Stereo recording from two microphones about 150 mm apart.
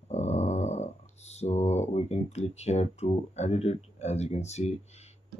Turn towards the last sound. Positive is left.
turn(degrees=45)  # may be behind; listen again after turning